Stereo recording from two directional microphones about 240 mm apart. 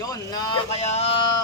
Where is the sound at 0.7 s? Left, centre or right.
Left.